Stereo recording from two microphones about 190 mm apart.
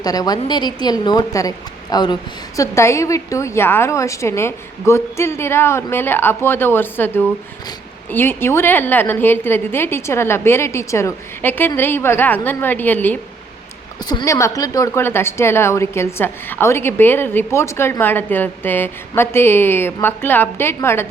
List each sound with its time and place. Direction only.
0.0 s a woman's voice: 20° left (ahead or behind)